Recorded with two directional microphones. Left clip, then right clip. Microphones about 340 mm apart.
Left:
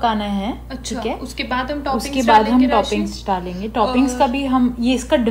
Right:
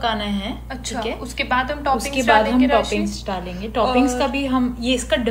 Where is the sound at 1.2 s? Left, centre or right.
Centre.